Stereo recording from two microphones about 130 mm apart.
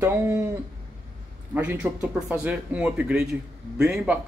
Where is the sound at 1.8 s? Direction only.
15° right (ahead or behind).